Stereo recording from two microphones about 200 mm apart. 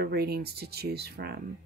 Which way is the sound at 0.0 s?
50° right (ahead or behind).